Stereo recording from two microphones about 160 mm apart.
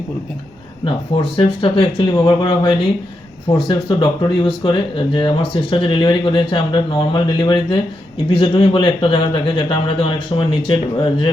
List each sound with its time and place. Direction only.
0.9 s speech: 35° left (ahead or behind)